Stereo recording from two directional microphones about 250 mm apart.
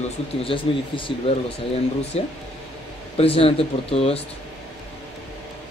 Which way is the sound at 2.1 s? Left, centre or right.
Left.